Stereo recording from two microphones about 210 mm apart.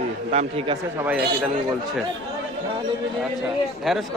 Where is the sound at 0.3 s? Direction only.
30° right (ahead or behind).